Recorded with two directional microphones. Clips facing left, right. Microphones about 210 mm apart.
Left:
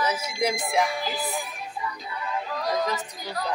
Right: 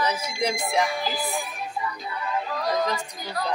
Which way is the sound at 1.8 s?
65° right (ahead or behind).